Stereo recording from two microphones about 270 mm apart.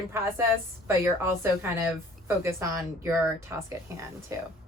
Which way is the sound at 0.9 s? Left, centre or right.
Centre.